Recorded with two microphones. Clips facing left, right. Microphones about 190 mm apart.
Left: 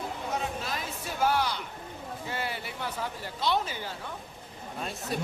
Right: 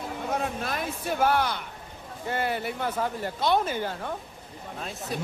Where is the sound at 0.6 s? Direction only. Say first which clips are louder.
Right 5 dB; 55° right (ahead or behind).